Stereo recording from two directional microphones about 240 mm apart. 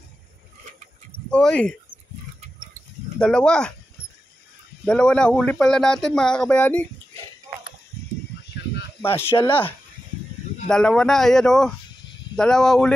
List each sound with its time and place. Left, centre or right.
1.3 s speech: centre
3.2 s speech: centre
4.8 s speech: centre
8.5 s a sound: left
9.5 s speech: centre